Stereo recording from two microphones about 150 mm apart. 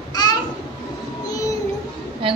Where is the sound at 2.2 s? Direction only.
35° right (ahead or behind).